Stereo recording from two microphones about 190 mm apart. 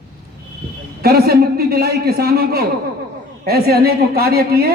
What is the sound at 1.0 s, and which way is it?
A man's voice, 55° right (ahead or behind).